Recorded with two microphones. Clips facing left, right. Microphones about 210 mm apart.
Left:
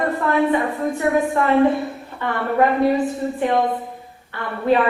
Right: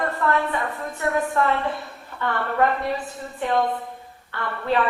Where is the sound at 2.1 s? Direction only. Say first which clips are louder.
Right 2 dB; 20° left (ahead or behind).